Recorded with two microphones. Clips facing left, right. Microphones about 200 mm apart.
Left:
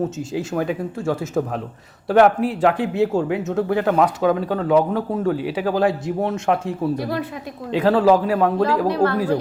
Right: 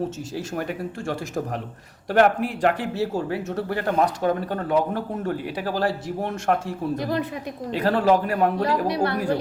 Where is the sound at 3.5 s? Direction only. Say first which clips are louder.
Left 6 dB; 90° left.